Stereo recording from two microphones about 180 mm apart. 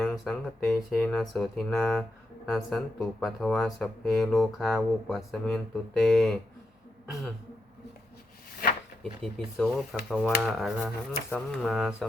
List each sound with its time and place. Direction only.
0.0 s a sound: 5° left (ahead or behind)
0.9 s speech: 5° left (ahead or behind)
9.2 s speech: centre (ahead or behind)